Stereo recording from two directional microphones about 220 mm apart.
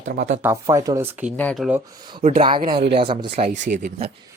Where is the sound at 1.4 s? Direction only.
5° left (ahead or behind).